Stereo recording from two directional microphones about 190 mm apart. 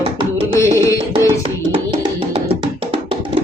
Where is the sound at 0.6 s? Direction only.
15° left (ahead or behind).